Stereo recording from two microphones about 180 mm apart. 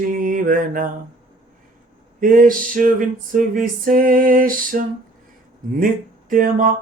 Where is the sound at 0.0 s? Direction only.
50° right (ahead or behind).